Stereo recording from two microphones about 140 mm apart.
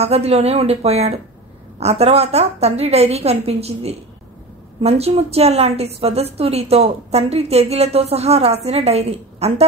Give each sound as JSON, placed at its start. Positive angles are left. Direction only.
{"t": 0.0, "sound": "a woman's voice", "side_deg": -50}